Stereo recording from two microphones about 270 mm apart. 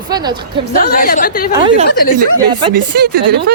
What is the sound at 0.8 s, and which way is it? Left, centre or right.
Speech, left.